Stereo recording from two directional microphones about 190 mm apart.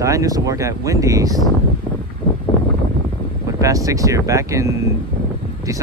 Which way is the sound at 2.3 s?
25° left (ahead or behind).